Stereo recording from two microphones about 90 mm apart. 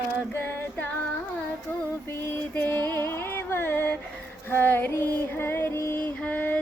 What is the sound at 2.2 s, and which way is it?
Music, 25° left (ahead or behind).